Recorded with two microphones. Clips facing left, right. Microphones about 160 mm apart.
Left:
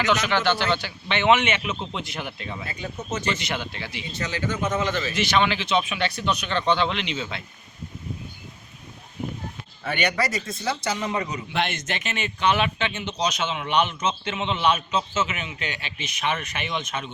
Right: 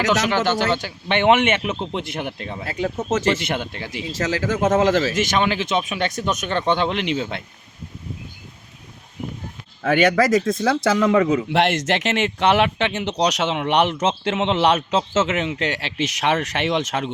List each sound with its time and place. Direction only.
0.3 s a man's voice: 45° right (ahead or behind)
2.6 s speech: 90° right
3.3 s a man's voice: 50° right (ahead or behind)
4.0 s speech: 90° right
5.1 s a man's voice: 45° right (ahead or behind)
9.8 s speech: 90° right